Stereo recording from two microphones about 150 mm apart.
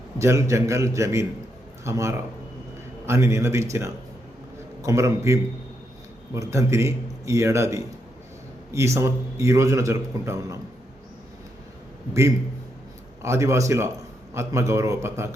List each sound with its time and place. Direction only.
0.2 s a man's voice: 20° right (ahead or behind)
13.2 s a man's voice: 20° right (ahead or behind)